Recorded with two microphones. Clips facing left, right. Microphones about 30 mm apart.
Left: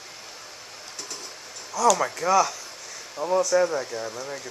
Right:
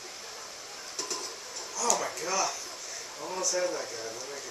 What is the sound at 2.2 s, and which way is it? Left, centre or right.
Speech, left.